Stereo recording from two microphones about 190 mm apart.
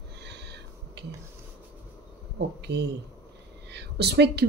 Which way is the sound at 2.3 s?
60° right (ahead or behind).